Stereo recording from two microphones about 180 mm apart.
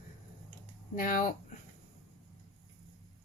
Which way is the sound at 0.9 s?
45° left (ahead or behind).